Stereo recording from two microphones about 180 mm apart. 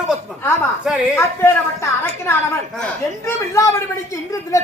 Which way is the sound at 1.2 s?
15° left (ahead or behind).